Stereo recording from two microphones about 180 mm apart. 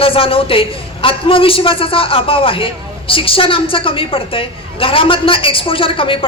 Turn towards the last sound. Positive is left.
turn(degrees=30)  # may be behind; listen again after turning